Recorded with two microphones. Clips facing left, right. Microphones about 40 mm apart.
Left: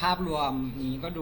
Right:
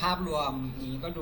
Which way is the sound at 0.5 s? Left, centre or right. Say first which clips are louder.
Left 4 dB; left.